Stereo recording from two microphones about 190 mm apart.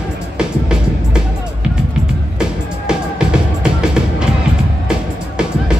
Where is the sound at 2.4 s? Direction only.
5° right (ahead or behind).